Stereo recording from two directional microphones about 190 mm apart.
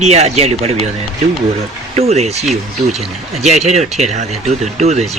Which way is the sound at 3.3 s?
35° right (ahead or behind).